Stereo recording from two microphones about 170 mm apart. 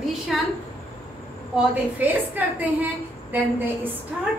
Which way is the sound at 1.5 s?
10° right (ahead or behind).